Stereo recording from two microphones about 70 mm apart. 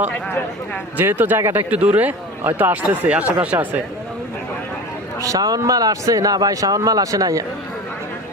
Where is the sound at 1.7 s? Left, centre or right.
Right.